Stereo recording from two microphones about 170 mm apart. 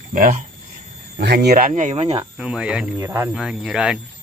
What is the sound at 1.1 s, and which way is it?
Speech, 70° right (ahead or behind).